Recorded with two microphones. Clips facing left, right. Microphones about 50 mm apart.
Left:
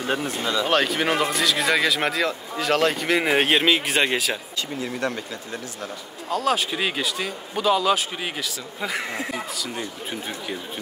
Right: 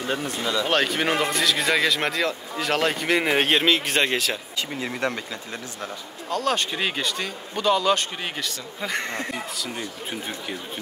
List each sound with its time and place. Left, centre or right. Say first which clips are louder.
0.1 s speech: left 1 dB; left
0.7 s speech: left 1 dB; centre
6.3 s speech: left 2 dB; centre